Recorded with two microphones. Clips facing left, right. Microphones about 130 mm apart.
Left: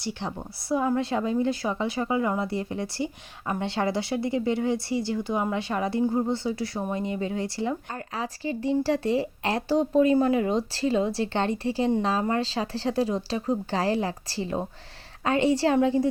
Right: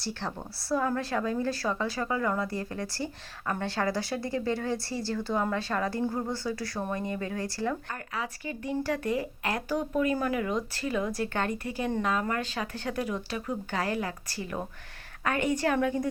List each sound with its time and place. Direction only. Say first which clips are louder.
0.0 s a woman's voice: left 3 dB; 20° left (ahead or behind)